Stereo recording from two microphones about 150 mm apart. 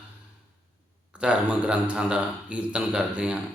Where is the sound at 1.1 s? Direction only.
10° right (ahead or behind).